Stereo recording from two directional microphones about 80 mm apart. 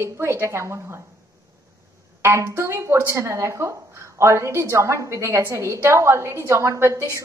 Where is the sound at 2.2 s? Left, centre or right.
Right.